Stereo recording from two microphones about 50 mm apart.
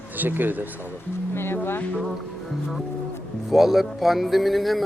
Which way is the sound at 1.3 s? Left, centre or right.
Left.